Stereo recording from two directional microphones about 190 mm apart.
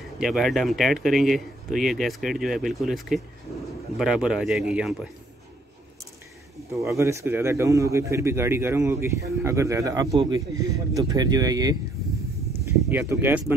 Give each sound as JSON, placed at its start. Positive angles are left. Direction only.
{"t": 0.2, "sound": "speech", "side_deg": 0}
{"t": 6.7, "sound": "speech", "side_deg": -15}